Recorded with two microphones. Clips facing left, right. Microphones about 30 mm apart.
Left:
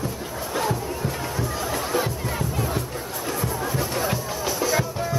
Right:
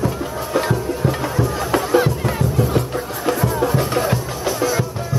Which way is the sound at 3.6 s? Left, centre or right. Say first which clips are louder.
Right 9 dB; right.